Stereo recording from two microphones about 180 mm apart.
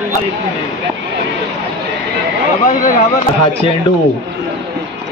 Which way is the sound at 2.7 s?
50° left (ahead or behind).